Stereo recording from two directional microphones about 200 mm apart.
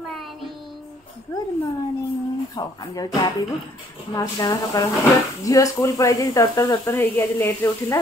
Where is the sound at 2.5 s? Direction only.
20° left (ahead or behind).